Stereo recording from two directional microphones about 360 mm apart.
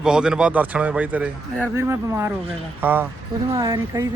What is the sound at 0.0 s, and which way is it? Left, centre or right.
Speech, centre.